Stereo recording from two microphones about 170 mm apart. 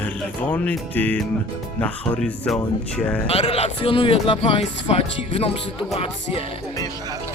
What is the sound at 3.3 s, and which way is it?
Speech, 35° left (ahead or behind).